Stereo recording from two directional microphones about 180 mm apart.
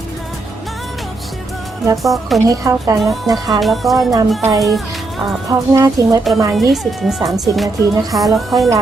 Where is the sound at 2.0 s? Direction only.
Centre (ahead or behind).